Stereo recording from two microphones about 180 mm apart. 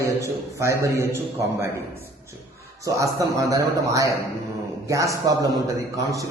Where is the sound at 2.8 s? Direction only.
15° right (ahead or behind).